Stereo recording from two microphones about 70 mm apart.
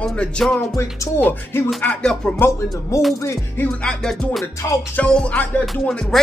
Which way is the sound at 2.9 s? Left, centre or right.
Left.